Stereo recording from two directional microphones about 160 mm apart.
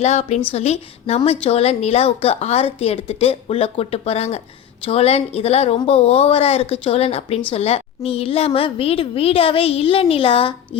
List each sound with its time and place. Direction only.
0.0 s a woman's voice: 40° left (ahead or behind)